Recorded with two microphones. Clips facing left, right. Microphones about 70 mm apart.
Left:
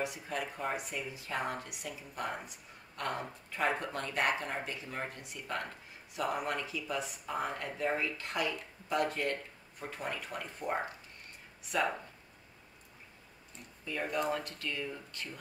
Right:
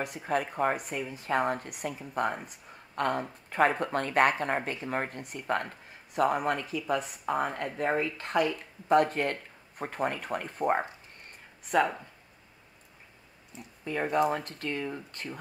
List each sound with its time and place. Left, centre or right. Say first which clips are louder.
0.0 s speech: right 6 dB; right
13.5 s speech: right 7 dB; centre
14.3 s speech: right 4 dB; right